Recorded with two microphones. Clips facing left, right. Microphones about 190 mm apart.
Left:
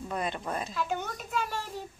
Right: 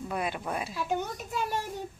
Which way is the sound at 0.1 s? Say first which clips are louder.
Even; 5° right (ahead or behind).